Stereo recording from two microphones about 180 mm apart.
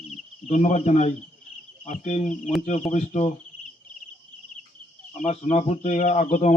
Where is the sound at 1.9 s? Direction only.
40° left (ahead or behind).